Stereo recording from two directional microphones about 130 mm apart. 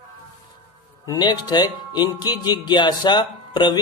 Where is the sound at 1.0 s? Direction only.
30° left (ahead or behind).